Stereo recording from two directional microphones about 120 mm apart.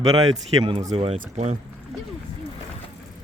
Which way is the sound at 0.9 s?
55° right (ahead or behind).